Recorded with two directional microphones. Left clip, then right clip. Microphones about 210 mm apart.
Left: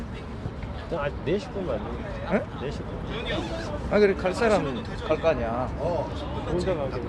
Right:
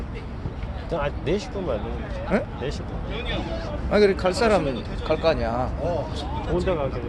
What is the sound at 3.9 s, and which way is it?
Speech, 40° right (ahead or behind).